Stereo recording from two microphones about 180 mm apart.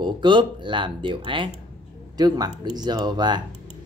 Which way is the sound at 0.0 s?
25° right (ahead or behind).